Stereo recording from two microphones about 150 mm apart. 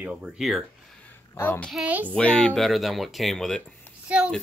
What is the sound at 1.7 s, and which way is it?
Speech, 5° right (ahead or behind).